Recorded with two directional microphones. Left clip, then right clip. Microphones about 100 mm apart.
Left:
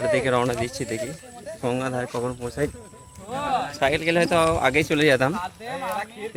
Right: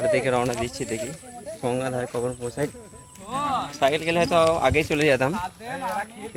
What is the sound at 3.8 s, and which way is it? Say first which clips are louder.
Speech: even; 40° left (ahead or behind).